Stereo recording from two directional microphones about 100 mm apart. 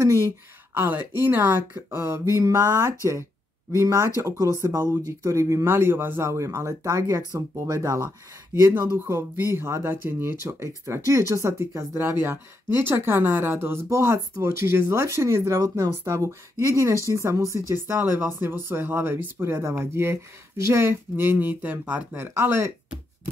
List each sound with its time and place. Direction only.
0.7 s speech: 20° right (ahead or behind)